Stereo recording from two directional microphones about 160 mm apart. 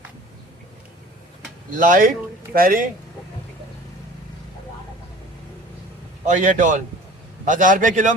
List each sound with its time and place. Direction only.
1.7 s speech: 60° right (ahead or behind)
6.2 s a man's voice: 55° right (ahead or behind)